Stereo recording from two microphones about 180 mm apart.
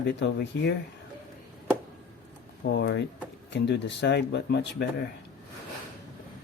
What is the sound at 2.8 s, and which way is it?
Speech, 75° left (ahead or behind).